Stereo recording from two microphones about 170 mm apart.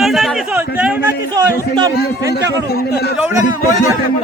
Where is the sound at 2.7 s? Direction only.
70° left (ahead or behind).